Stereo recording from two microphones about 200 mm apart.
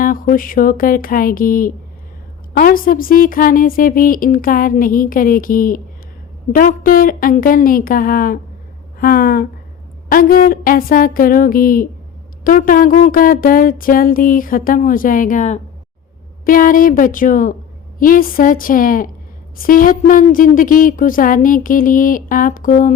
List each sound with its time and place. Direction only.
0.0 s a woman's voice: 45° left (ahead or behind)